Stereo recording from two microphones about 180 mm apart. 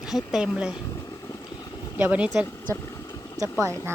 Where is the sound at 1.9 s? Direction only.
10° right (ahead or behind).